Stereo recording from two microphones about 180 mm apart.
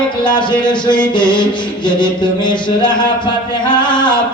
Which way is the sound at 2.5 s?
25° left (ahead or behind).